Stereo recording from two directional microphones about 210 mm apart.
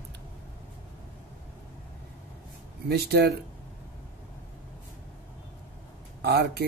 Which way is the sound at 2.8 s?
50° right (ahead or behind).